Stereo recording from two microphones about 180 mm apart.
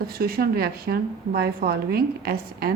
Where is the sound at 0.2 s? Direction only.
60° right (ahead or behind).